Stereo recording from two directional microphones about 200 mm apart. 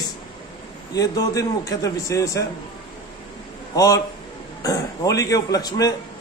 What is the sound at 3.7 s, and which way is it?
A man's voice, 15° left (ahead or behind).